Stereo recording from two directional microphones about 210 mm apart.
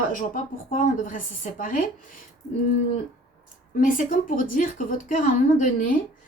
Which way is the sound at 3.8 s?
40° left (ahead or behind).